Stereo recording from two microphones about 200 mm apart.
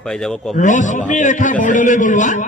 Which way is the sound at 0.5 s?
40° left (ahead or behind).